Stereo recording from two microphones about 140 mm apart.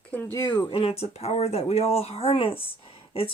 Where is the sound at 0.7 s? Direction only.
45° left (ahead or behind).